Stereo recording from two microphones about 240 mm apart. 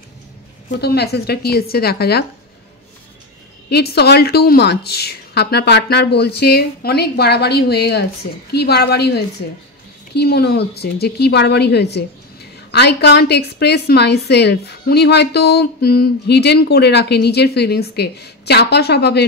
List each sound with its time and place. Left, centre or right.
0.7 s speech: left
3.7 s a woman's voice: left